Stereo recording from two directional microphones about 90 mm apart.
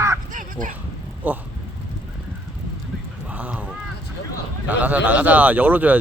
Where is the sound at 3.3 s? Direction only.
15° right (ahead or behind).